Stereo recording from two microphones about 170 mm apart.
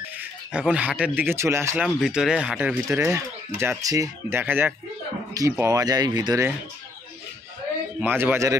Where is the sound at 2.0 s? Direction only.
5° right (ahead or behind); by 6.4 s 25° right (ahead or behind).